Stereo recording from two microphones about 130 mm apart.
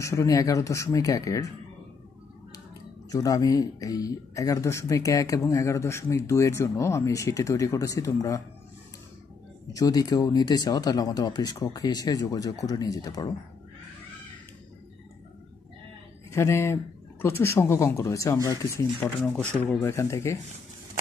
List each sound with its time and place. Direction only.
0.0 s speech: 25° left (ahead or behind)
3.1 s speech: 25° left (ahead or behind)
9.7 s speech: 25° left (ahead or behind)
16.3 s speech: 20° left (ahead or behind)